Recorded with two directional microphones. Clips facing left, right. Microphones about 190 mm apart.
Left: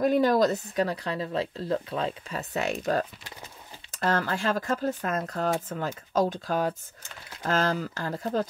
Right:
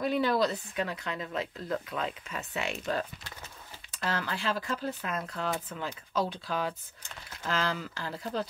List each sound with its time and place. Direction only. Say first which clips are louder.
0.0 s speech: left 6 dB; 45° left (ahead or behind)